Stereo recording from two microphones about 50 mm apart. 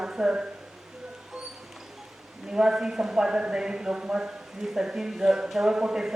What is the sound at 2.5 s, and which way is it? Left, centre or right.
A woman's voice, centre.